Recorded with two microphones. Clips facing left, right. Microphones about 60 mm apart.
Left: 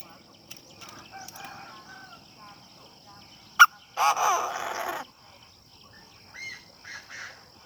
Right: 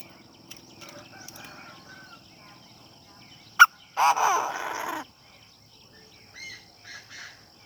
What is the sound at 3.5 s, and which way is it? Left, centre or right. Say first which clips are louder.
Fowl: right 1 dB; right.